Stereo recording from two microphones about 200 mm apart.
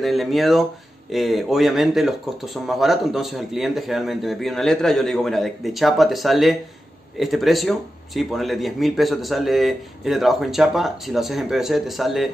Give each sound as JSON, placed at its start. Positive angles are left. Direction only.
{"t": 0.0, "sound": "speech", "side_deg": 0}